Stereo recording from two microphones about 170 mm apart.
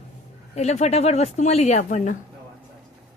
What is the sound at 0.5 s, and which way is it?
Speech, 40° left (ahead or behind).